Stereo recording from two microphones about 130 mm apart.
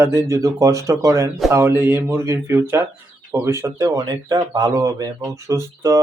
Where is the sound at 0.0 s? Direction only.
20° right (ahead or behind).